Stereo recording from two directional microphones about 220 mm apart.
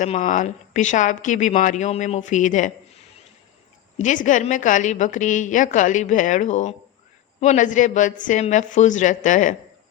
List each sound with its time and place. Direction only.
0.0 s a woman's voice: 35° left (ahead or behind)
4.0 s a woman's voice: 35° left (ahead or behind)